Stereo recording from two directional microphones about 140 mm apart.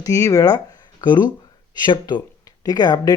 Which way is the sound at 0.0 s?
20° left (ahead or behind).